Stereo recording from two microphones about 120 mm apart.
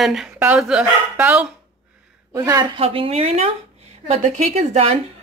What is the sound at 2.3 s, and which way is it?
Speech, 30° right (ahead or behind).